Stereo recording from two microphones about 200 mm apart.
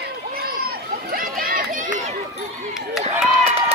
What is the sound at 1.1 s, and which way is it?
Run, 45° right (ahead or behind).